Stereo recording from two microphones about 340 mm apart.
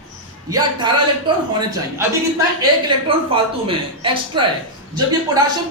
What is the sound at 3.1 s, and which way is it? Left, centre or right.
A man's voice, centre.